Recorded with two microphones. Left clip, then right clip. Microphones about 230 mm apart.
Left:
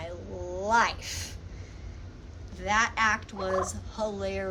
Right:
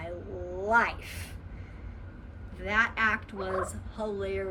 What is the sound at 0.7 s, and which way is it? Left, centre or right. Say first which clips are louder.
Turkey: left 1 dB; left.